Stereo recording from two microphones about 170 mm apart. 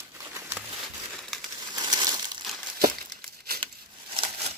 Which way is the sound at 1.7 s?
25° right (ahead or behind).